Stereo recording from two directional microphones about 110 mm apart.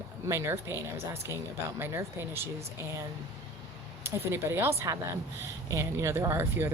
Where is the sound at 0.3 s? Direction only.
25° right (ahead or behind).